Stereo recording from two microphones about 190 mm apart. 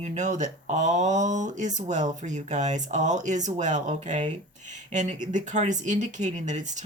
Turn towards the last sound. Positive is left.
turn(degrees=-40)  # may be behind; listen again after turning